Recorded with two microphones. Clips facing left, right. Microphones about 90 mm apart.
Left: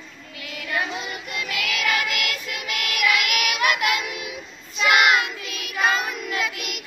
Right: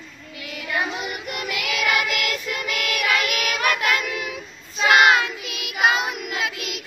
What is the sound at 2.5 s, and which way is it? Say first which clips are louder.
Music: right 3 dB; 40° right (ahead or behind).